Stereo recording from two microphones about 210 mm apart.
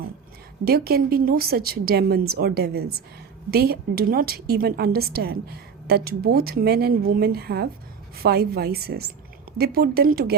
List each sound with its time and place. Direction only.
0.6 s a woman's voice: 45° right (ahead or behind)